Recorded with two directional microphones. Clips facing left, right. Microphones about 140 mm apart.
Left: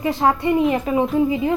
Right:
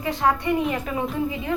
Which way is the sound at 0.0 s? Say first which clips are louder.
Left 4 dB; 25° left (ahead or behind).